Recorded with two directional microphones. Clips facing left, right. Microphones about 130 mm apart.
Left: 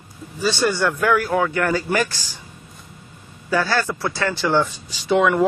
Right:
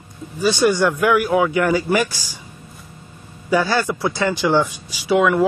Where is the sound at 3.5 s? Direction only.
15° right (ahead or behind).